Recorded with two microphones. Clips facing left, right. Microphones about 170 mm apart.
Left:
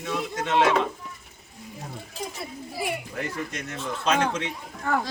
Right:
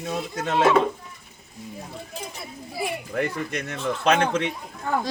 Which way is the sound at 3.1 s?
60° right (ahead or behind).